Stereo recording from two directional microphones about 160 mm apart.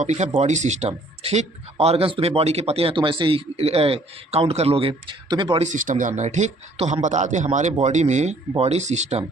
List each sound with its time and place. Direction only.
0.0 s a man's voice: 45° right (ahead or behind); by 5.6 s 30° right (ahead or behind)
5.6 s a man's voice: 55° right (ahead or behind)